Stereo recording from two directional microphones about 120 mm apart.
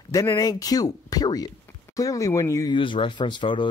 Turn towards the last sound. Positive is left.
turn(degrees=45)  # may be behind; listen again after turning